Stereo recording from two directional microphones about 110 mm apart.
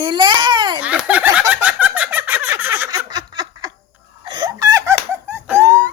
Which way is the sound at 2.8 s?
35° right (ahead or behind).